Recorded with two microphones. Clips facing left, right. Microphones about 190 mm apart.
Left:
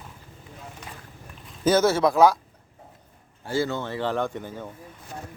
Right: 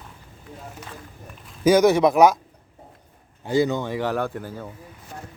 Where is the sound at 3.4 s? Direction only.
20° right (ahead or behind).